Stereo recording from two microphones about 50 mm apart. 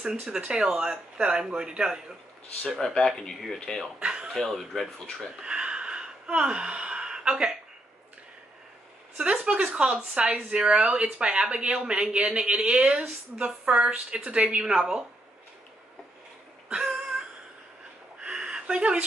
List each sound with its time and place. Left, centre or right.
0.0 s a woman's voice: centre
2.8 s speech: centre
4.0 s a woman's voice: centre
4.3 s speech: centre
5.4 s gasp: centre
9.1 s a woman's voice: centre
16.6 s a sound: centre
18.3 s a sound: centre